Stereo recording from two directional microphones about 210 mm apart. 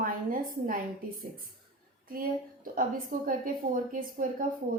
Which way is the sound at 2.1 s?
40° right (ahead or behind).